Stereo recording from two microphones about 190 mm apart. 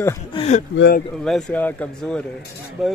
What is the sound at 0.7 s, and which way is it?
Speech, 65° left (ahead or behind).